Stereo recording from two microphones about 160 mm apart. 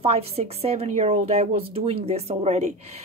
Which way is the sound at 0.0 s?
40° right (ahead or behind).